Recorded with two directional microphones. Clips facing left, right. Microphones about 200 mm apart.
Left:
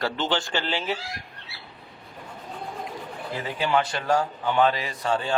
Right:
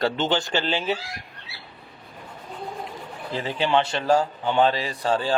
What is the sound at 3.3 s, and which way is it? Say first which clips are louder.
Speech: right 2 dB; 25° right (ahead or behind).